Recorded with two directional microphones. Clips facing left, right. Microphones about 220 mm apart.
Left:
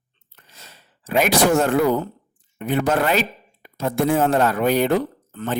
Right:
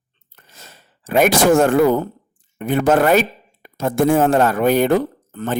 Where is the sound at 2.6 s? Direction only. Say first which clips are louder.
Right 5 dB; 50° right (ahead or behind).